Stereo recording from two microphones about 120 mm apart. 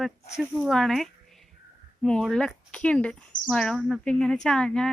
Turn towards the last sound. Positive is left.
turn(degrees=5)  # may be behind; listen again after turning